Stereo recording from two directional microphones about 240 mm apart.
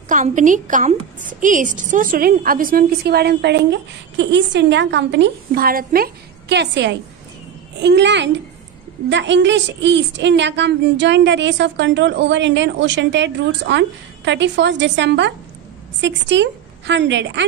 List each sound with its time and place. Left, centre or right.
0.1 s a woman's voice: right